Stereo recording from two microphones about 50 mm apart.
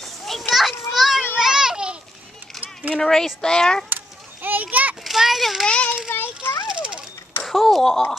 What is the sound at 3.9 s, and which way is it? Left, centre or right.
Children playing, right.